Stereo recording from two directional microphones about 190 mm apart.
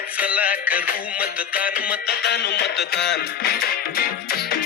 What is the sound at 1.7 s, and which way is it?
Music, 50° left (ahead or behind).